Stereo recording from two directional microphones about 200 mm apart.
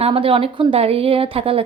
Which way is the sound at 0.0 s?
25° right (ahead or behind).